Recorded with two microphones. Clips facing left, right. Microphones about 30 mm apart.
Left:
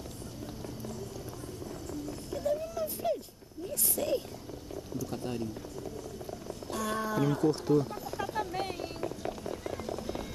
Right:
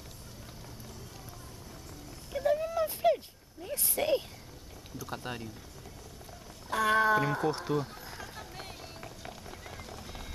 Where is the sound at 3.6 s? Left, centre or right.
Right.